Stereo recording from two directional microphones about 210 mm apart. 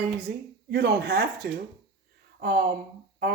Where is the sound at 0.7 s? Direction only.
50° right (ahead or behind).